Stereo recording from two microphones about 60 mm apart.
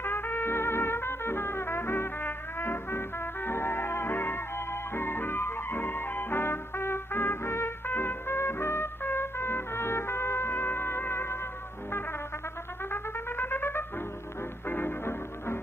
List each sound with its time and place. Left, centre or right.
0.0 s brass instrument: left
12.9 s music: left